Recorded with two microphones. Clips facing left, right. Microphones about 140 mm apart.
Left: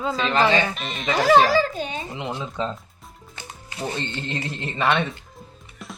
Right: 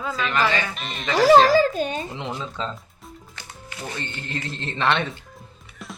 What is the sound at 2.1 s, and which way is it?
Speech, 5° left (ahead or behind).